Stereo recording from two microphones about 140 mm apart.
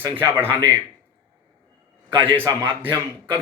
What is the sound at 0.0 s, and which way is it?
Speech, 15° right (ahead or behind).